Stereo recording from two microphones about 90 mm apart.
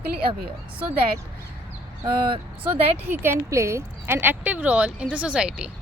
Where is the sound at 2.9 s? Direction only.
25° right (ahead or behind).